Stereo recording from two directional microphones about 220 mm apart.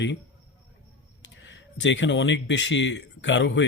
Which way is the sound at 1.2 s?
55° left (ahead or behind).